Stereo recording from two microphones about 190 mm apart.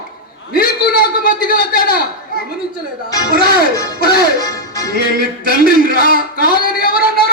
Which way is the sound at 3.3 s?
55° left (ahead or behind).